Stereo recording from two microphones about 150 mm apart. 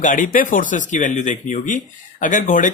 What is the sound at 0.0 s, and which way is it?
Speech, 60° left (ahead or behind).